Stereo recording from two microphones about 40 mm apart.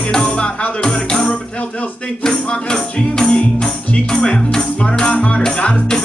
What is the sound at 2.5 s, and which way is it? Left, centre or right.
Music, left.